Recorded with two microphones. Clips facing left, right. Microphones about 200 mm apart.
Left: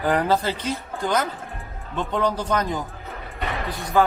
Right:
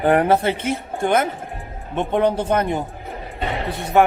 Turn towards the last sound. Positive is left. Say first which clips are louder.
# right 4 dB
turn(degrees=-30)  # may be behind; listen again after turning